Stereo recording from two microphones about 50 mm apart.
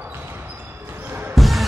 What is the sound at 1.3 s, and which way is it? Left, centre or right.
Music, centre.